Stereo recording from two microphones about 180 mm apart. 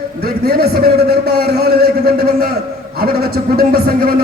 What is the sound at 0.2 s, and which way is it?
A man's voice, 60° right (ahead or behind).